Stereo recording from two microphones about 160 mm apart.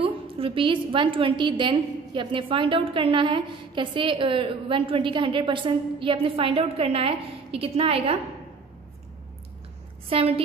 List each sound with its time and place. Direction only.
0.0 s a woman's voice: 35° right (ahead or behind)
10.0 s a woman's voice: 35° right (ahead or behind)